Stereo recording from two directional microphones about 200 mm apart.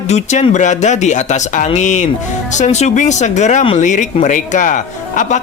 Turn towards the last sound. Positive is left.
turn(degrees=40)  # may be behind; listen again after turning